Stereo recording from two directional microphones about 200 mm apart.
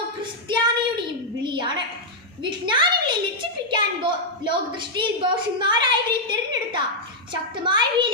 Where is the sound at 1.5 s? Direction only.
25° right (ahead or behind).